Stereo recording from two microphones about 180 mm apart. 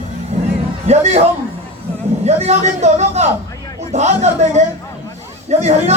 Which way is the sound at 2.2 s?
40° right (ahead or behind).